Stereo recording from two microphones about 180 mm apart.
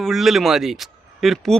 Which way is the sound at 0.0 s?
Centre (ahead or behind).